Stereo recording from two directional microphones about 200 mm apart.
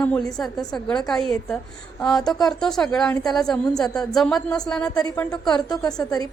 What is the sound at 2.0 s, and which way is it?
A woman's voice, 5° left (ahead or behind).